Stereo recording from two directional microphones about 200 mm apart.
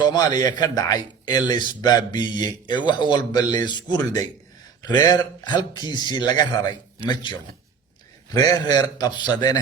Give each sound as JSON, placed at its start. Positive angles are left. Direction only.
{"t": 0.0, "sound": "a man's voice", "side_deg": 20}